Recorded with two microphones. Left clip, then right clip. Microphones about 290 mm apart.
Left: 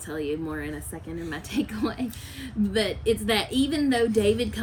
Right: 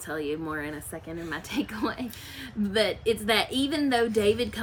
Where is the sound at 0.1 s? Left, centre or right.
Centre.